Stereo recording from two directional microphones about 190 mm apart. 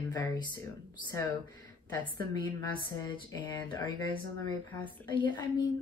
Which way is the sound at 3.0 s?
20° left (ahead or behind).